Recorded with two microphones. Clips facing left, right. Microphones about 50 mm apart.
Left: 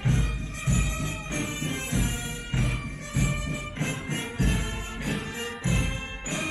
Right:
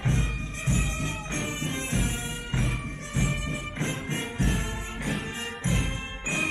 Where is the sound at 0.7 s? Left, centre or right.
Right.